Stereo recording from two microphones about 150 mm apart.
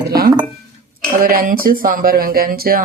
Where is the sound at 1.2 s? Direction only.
75° right (ahead or behind).